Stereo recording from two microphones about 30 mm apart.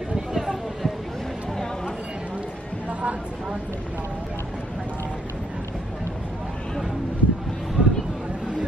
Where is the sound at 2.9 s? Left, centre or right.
Right.